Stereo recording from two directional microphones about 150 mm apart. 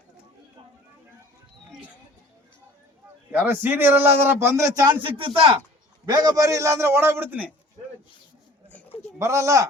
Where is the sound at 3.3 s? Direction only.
15° right (ahead or behind); by 5.5 s 40° right (ahead or behind).